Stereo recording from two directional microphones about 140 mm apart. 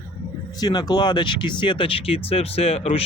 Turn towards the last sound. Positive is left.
turn(degrees=45)  # may be behind; listen again after turning